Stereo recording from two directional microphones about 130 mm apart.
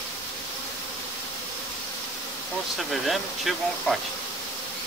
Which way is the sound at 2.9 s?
Centre (ahead or behind).